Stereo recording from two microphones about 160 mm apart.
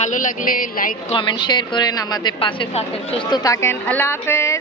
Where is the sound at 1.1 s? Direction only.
30° left (ahead or behind).